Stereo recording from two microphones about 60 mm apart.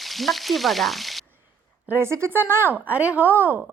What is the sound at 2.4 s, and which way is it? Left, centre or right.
Speech, right.